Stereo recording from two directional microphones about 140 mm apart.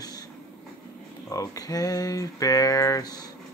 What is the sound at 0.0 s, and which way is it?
Vehicle, 25° left (ahead or behind).